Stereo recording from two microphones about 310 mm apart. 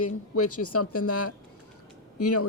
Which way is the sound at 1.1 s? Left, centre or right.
Left.